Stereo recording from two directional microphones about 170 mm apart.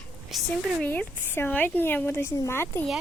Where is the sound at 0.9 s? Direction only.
10° left (ahead or behind).